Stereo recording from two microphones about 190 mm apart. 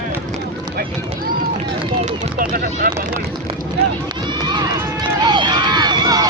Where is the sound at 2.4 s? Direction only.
50° right (ahead or behind).